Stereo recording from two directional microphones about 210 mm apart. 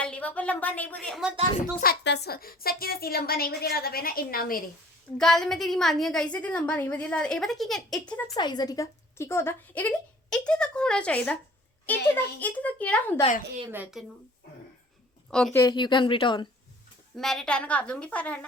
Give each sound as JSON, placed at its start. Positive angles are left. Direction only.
{"t": 0.0, "sound": "a woman's voice", "side_deg": 5}
{"t": 1.8, "sound": "a woman's voice", "side_deg": 50}
{"t": 5.1, "sound": "a woman's voice", "side_deg": 0}
{"t": 8.4, "sound": "a woman's voice", "side_deg": 20}
{"t": 13.7, "sound": "speech", "side_deg": -10}
{"t": 15.3, "sound": "a woman's voice", "side_deg": 5}
{"t": 15.6, "sound": "speech", "side_deg": 20}
{"t": 17.2, "sound": "a woman's voice", "side_deg": 0}